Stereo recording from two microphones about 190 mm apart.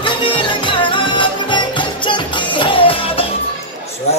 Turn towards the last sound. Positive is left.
turn(degrees=30)  # may be behind; listen again after turning